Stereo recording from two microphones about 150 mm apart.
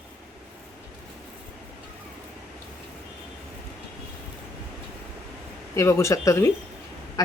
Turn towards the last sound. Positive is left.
turn(degrees=20)  # may be behind; listen again after turning